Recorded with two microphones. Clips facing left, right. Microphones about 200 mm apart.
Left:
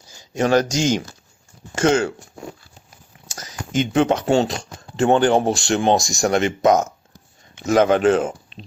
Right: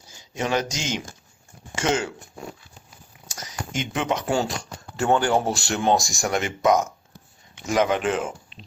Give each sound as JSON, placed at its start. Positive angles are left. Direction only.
{"t": 0.3, "sound": "speech", "side_deg": 40}
{"t": 3.8, "sound": "speech", "side_deg": 30}
{"t": 7.8, "sound": "speech", "side_deg": 35}